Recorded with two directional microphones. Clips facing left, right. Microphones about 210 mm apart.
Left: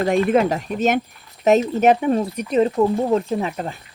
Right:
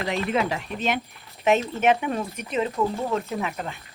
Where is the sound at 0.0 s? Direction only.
50° left (ahead or behind).